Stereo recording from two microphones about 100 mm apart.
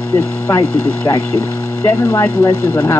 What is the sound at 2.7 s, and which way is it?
Speech, 20° left (ahead or behind).